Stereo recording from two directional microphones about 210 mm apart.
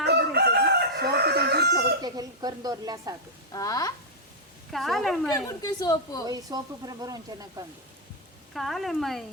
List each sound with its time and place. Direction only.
0.0 s crowing: 50° right (ahead or behind)
2.0 s speech: 20° right (ahead or behind)
3.5 s a woman's voice: 15° left (ahead or behind)
4.7 s speech: centre (ahead or behind)
5.5 s a woman's voice: 15° left (ahead or behind)
6.2 s speech: 20° right (ahead or behind)
8.5 s speech: centre (ahead or behind)